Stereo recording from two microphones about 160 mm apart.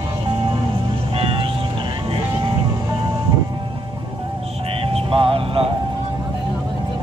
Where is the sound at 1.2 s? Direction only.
35° right (ahead or behind).